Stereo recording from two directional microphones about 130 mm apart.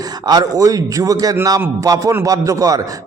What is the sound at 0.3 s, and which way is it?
A man's voice, 30° right (ahead or behind).